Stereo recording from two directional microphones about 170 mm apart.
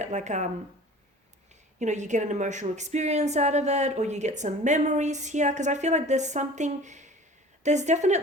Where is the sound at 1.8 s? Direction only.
45° right (ahead or behind).